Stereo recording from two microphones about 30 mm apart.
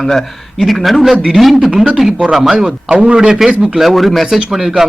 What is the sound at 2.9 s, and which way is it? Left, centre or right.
Speech, right.